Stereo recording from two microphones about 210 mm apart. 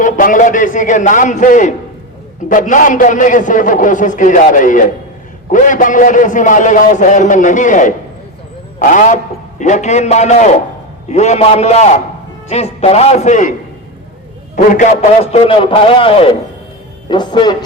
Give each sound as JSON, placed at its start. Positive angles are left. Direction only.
{"t": 0.0, "sound": "a man's voice", "side_deg": 40}